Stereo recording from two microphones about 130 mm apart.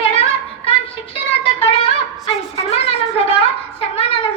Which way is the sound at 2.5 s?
50° left (ahead or behind).